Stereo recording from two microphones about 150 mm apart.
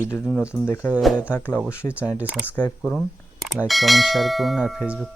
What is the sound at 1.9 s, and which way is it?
Speech, 10° right (ahead or behind).